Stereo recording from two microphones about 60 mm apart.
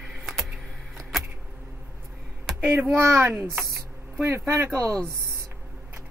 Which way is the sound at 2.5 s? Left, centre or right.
Centre.